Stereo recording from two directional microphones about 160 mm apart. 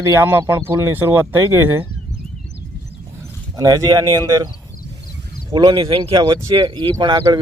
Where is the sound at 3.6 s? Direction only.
20° right (ahead or behind).